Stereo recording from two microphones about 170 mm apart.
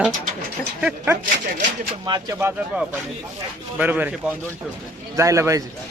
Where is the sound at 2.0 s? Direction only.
20° right (ahead or behind).